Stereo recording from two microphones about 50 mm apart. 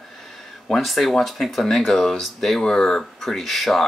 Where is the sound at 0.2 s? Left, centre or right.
Centre.